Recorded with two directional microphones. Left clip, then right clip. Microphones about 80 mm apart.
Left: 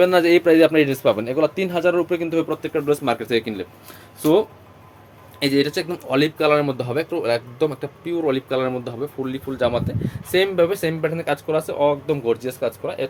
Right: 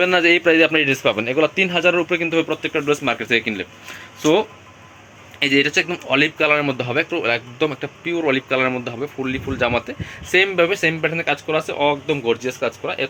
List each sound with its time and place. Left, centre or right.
0.0 s speech: left; by 12.2 s centre
12.2 s speech: left